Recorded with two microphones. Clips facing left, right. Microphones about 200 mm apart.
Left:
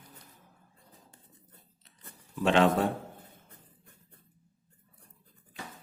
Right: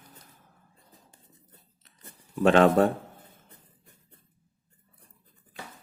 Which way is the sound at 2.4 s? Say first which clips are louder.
Right 5 dB; 50° right (ahead or behind).